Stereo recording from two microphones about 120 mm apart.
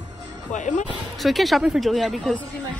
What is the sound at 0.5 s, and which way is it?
Speech, 90° left.